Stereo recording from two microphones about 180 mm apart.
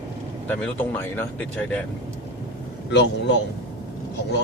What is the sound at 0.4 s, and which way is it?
Speech, 10° left (ahead or behind).